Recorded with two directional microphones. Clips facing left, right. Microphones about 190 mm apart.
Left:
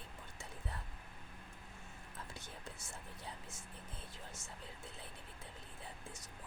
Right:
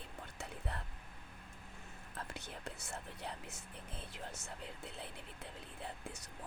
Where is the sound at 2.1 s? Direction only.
65° right (ahead or behind).